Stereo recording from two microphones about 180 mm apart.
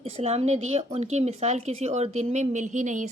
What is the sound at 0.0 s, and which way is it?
A woman's voice, 35° right (ahead or behind).